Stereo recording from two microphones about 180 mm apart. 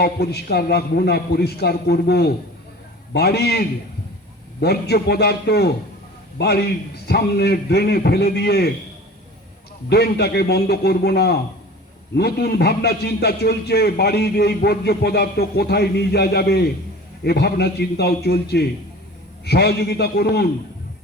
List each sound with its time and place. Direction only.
0.0 s a man's voice: 65° left (ahead or behind)
9.9 s a man's voice: 65° left (ahead or behind)